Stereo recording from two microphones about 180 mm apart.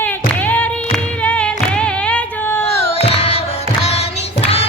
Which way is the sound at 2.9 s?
35° left (ahead or behind).